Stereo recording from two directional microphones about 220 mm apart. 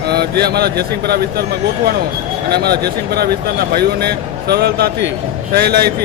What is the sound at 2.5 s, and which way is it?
Speech, 45° right (ahead or behind).